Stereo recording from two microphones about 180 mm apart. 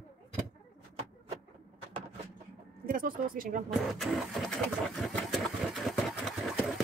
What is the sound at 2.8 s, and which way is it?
Speech, 50° right (ahead or behind).